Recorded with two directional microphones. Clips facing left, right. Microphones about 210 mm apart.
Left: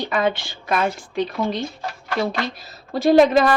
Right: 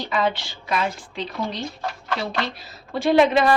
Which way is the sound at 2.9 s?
40° left (ahead or behind).